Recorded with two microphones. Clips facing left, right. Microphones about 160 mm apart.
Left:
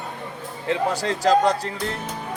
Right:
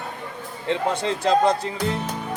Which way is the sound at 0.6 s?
Centre (ahead or behind).